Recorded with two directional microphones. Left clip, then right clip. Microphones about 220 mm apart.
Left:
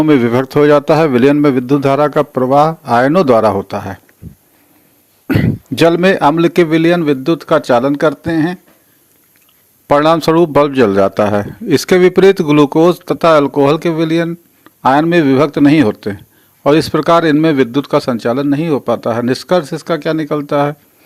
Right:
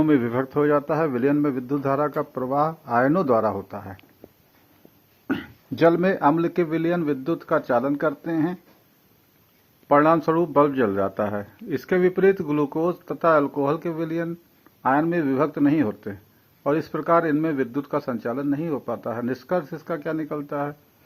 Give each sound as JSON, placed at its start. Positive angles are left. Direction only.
{"t": 0.0, "sound": "a man's voice", "side_deg": 45}
{"t": 5.7, "sound": "a man's voice", "side_deg": 35}
{"t": 9.8, "sound": "a man's voice", "side_deg": 45}